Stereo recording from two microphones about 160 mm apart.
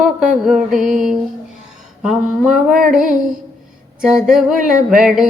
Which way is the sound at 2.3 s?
5° right (ahead or behind).